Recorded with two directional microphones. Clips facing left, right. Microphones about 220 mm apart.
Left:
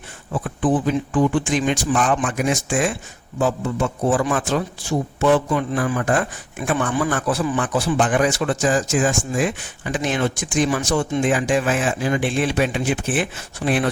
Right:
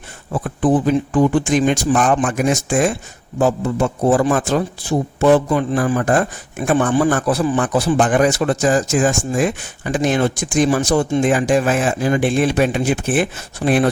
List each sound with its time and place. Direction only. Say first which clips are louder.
0.4 s a man's voice: right 4 dB; 40° right (ahead or behind)